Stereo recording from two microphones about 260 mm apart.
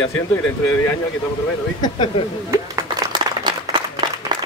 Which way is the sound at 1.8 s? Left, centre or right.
Centre.